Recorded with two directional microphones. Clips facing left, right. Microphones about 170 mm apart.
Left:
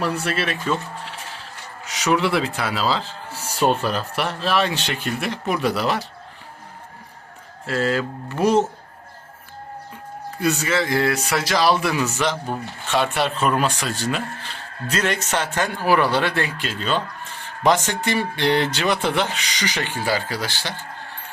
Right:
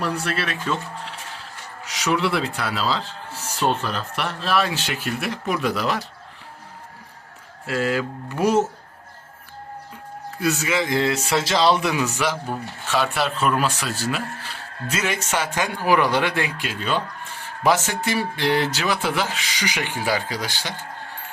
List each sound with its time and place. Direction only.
0.0 s a man's voice: 5° left (ahead or behind)
1.9 s a man's voice: centre (ahead or behind)
7.7 s speech: 10° right (ahead or behind)
10.4 s a man's voice: 5° right (ahead or behind)
10.8 s speech: 20° right (ahead or behind)
12.5 s speech: centre (ahead or behind)